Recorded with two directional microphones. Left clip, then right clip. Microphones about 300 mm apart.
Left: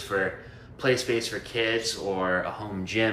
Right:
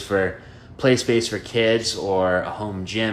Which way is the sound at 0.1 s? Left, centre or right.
Right.